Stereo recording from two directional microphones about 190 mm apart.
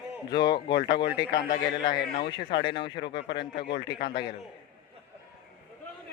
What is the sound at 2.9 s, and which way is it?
Speech, 65° left (ahead or behind).